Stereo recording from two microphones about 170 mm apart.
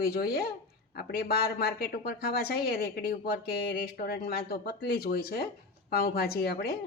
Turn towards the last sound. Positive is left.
turn(degrees=65)  # may be behind; listen again after turning